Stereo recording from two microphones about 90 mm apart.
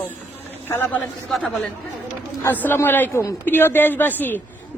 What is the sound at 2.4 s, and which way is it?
A woman's voice, 25° left (ahead or behind).